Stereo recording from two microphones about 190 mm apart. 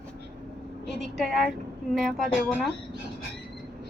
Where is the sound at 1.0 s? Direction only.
Centre (ahead or behind).